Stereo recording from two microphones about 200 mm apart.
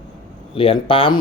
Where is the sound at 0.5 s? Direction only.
25° left (ahead or behind).